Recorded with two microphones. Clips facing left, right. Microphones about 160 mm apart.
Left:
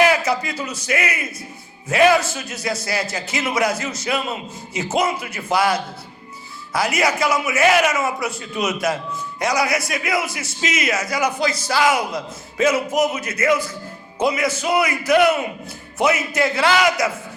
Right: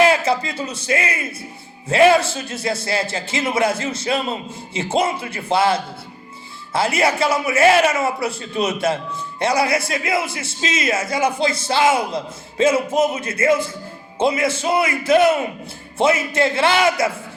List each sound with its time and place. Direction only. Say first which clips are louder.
0.0 s a man's voice: right 1 dB; 25° right (ahead or behind)